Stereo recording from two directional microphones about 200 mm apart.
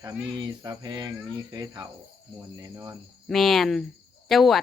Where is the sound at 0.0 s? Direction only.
20° right (ahead or behind).